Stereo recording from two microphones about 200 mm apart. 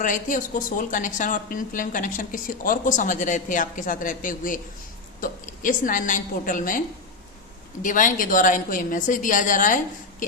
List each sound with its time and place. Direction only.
0.0 s a woman's voice: 40° left (ahead or behind)